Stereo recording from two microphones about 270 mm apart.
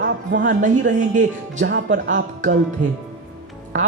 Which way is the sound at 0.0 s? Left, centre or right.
Right.